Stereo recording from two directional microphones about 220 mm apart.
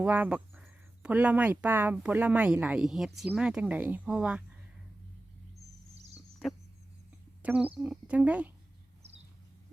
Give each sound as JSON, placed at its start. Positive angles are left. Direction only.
{"t": 0.0, "sound": "speech", "side_deg": -10}
{"t": 5.9, "sound": "a sound", "side_deg": -30}
{"t": 7.4, "sound": "speech", "side_deg": -5}